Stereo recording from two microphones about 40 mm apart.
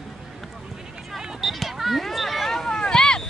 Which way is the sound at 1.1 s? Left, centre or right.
Centre.